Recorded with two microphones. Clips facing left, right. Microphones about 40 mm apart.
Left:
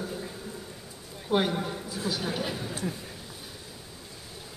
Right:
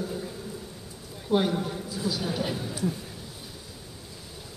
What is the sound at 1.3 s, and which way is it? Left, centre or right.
A woman's voice, centre.